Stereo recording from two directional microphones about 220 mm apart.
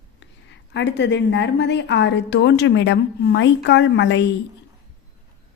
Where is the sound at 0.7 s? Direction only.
55° left (ahead or behind).